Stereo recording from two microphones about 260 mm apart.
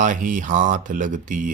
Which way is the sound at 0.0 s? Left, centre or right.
Right.